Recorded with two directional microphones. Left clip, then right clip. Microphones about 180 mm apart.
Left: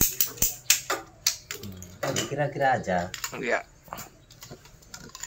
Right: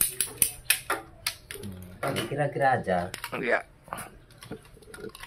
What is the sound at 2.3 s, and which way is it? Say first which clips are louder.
Speech: even; 5° right (ahead or behind).